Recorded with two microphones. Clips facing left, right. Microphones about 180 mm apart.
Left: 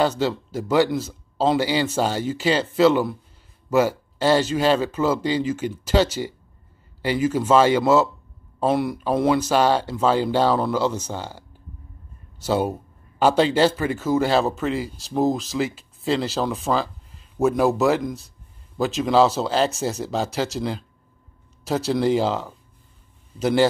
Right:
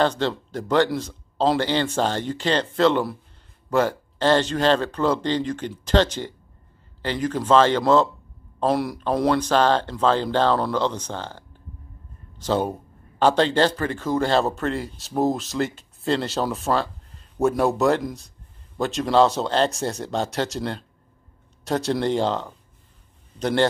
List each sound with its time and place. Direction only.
0.0 s speech: 5° left (ahead or behind)